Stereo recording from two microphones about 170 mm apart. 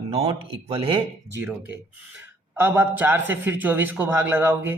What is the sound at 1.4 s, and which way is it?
A man's voice, 10° right (ahead or behind).